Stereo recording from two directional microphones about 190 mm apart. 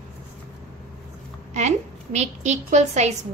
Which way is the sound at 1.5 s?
35° right (ahead or behind).